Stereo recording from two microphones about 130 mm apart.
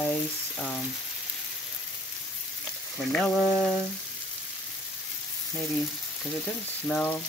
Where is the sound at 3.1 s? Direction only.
5° left (ahead or behind).